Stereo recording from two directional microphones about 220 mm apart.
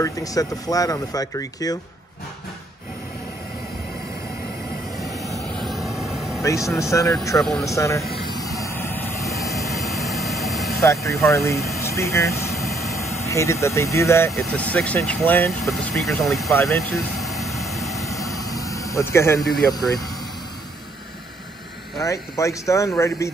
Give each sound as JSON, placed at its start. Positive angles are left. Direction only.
{"t": 0.0, "sound": "speech", "side_deg": 15}
{"t": 4.9, "sound": "vehicle", "side_deg": 0}
{"t": 6.4, "sound": "speech", "side_deg": 15}
{"t": 7.3, "sound": "speech", "side_deg": 0}
{"t": 7.6, "sound": "speech", "side_deg": 15}
{"t": 8.0, "sound": "a sound", "side_deg": 0}
{"t": 8.3, "sound": "vehicle", "side_deg": 15}
{"t": 9.7, "sound": "vehicle", "side_deg": 0}
{"t": 10.8, "sound": "speech", "side_deg": 15}
{"t": 11.8, "sound": "air conditioning", "side_deg": 15}
{"t": 12.9, "sound": "speech", "side_deg": 15}
{"t": 16.9, "sound": "vehicle", "side_deg": 0}
{"t": 17.9, "sound": "vehicle", "side_deg": 15}
{"t": 22.0, "sound": "speech", "side_deg": 15}